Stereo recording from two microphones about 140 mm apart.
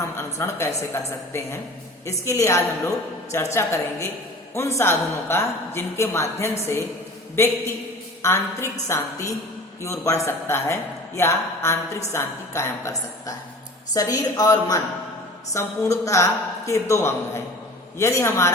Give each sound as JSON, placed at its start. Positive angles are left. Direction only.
{"t": 0.3, "sound": "a woman's voice", "side_deg": 20}
{"t": 4.8, "sound": "a woman's voice", "side_deg": 20}
{"t": 13.9, "sound": "a woman's voice", "side_deg": 25}